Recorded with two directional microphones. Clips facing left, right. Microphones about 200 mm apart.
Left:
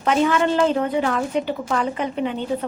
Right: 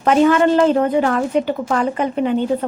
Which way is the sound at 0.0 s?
50° right (ahead or behind).